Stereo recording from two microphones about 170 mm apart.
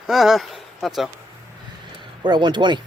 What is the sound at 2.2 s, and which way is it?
Speech, 25° right (ahead or behind).